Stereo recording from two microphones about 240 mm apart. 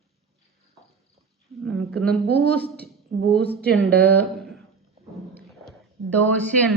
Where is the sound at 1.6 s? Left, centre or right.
Centre.